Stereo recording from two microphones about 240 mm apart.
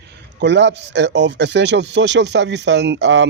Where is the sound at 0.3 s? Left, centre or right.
Right.